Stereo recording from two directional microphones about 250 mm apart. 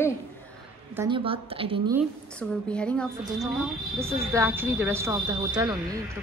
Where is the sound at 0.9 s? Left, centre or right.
Centre.